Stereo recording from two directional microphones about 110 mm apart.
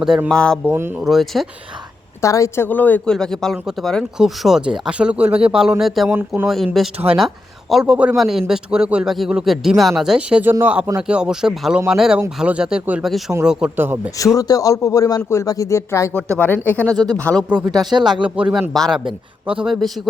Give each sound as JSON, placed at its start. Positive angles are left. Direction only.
{"t": 0.3, "sound": "a man's voice", "side_deg": 5}
{"t": 0.6, "sound": "speech", "side_deg": -20}
{"t": 1.0, "sound": "a man's voice", "side_deg": 0}
{"t": 2.2, "sound": "speech", "side_deg": 30}
{"t": 2.6, "sound": "speech", "side_deg": 15}
{"t": 3.1, "sound": "a man's voice", "side_deg": 5}
{"t": 6.1, "sound": "speech", "side_deg": -15}
{"t": 6.8, "sound": "a man's voice", "side_deg": 0}
{"t": 13.7, "sound": "speech", "side_deg": -20}
{"t": 14.2, "sound": "speech", "side_deg": 30}
{"t": 16.4, "sound": "speech", "side_deg": 15}
{"t": 16.9, "sound": "speech", "side_deg": -35}
{"t": 17.2, "sound": "speech", "side_deg": 10}
{"t": 17.7, "sound": "a man's voice", "side_deg": -5}